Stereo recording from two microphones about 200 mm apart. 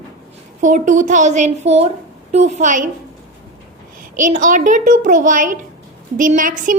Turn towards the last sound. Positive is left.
turn(degrees=-40)  # may be behind; listen again after turning